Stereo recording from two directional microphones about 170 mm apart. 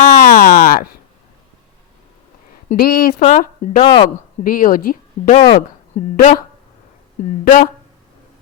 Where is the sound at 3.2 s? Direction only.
40° left (ahead or behind); by 5.3 s 55° left (ahead or behind).